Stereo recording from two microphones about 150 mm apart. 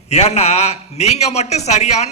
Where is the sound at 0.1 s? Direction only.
45° left (ahead or behind).